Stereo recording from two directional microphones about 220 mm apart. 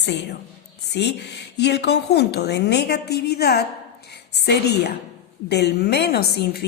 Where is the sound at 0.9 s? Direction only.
50° left (ahead or behind).